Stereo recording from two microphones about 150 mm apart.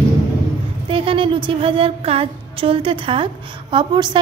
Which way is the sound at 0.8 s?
35° right (ahead or behind).